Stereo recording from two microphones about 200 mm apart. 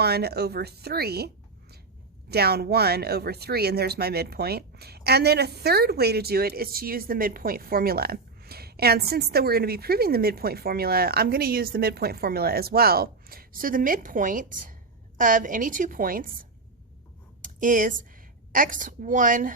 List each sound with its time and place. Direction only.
0.0 s speech: 55° right (ahead or behind)
2.3 s a woman's voice: 55° right (ahead or behind)